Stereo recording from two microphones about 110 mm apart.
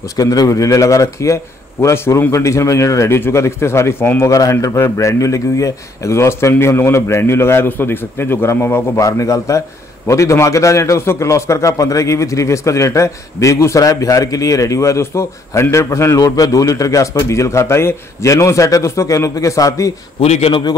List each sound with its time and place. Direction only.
0.1 s a man's voice: 35° left (ahead or behind)
4.3 s a man's voice: 30° left (ahead or behind)
20.2 s a man's voice: 70° left (ahead or behind)